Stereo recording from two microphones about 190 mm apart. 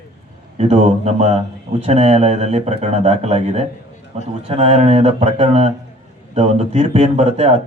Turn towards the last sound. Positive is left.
turn(degrees=-35)  # may be behind; listen again after turning